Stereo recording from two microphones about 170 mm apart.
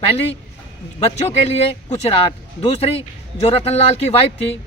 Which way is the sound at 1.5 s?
35° left (ahead or behind).